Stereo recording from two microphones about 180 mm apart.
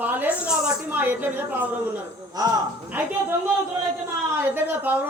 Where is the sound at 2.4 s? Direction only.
20° right (ahead or behind).